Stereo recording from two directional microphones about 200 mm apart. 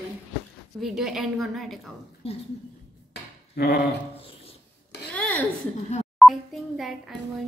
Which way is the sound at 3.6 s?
55° left (ahead or behind).